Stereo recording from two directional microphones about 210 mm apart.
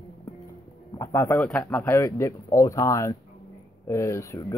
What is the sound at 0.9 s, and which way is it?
Speech, 10° left (ahead or behind).